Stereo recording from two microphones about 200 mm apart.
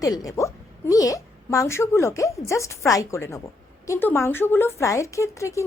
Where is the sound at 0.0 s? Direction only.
20° left (ahead or behind).